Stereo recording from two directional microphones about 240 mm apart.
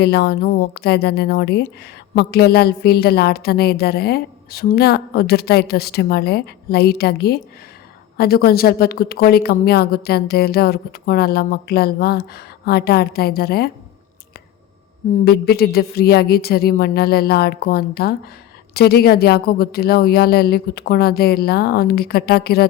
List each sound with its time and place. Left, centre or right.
0.0 s a woman's voice: left
15.2 s a woman's voice: left